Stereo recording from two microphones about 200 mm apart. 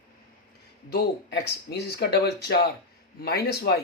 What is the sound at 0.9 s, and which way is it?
Speech, 55° left (ahead or behind).